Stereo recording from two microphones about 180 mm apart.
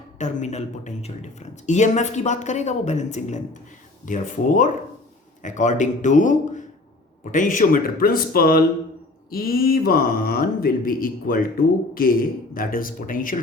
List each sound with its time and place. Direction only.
0.2 s a man's voice: 40° left (ahead or behind)
12.5 s a man's voice: 50° left (ahead or behind)